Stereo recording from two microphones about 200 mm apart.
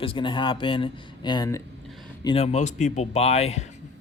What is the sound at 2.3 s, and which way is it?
Speech, 30° left (ahead or behind).